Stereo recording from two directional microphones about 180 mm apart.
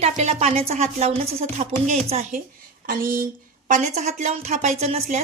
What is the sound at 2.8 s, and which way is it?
A woman's voice, 50° right (ahead or behind).